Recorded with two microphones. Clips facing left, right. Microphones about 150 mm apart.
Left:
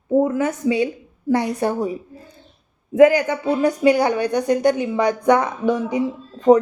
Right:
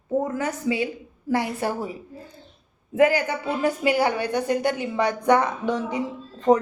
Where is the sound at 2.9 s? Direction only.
15° left (ahead or behind).